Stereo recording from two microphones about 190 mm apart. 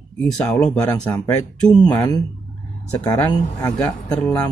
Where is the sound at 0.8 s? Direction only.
20° left (ahead or behind).